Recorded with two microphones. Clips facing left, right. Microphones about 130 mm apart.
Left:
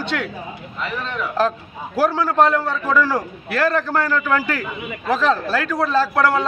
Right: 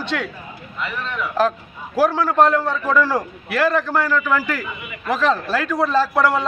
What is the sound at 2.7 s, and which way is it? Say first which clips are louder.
Speech: even; 5° left (ahead or behind).